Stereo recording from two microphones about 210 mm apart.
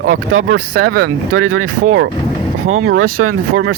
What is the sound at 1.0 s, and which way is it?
Speech, 80° right.